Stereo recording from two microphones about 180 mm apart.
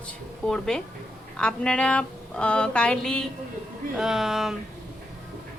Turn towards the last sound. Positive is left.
turn(degrees=0)  # may be behind; listen again after turning